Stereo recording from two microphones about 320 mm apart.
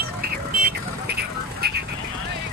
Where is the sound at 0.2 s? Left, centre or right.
Right.